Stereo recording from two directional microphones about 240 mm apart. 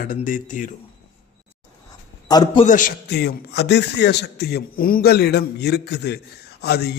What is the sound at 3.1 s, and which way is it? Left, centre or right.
A man's voice, left.